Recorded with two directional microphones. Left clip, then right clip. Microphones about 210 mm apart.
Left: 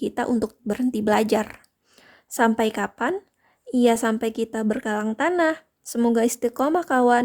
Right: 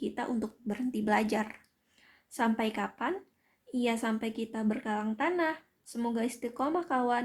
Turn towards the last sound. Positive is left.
turn(degrees=50)  # may be behind; listen again after turning